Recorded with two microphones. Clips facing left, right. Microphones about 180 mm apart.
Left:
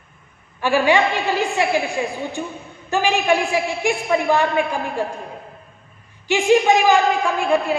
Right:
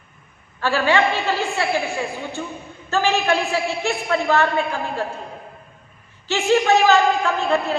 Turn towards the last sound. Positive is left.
turn(degrees=10)  # may be behind; listen again after turning